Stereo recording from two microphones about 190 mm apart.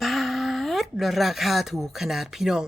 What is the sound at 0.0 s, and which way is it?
A woman's voice, centre (ahead or behind).